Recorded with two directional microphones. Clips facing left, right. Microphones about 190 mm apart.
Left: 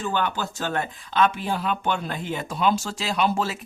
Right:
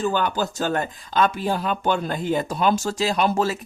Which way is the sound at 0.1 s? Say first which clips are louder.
Right 3 dB; 40° right (ahead or behind).